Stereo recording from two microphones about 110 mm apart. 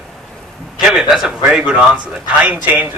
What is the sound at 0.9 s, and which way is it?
A man's voice, 5° right (ahead or behind).